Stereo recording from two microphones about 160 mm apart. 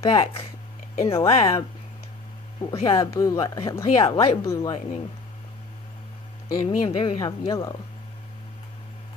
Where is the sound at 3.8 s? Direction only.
35° left (ahead or behind).